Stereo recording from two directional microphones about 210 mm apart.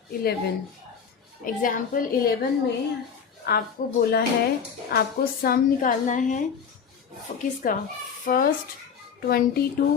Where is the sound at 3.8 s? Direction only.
40° left (ahead or behind).